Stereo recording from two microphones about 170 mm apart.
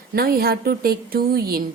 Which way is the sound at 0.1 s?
65° right (ahead or behind).